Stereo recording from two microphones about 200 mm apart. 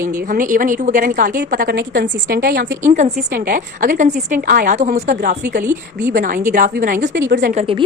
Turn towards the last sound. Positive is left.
turn(degrees=-30)  # may be behind; listen again after turning